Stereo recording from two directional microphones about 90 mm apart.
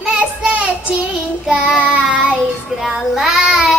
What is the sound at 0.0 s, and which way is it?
Child singing, 5° right (ahead or behind).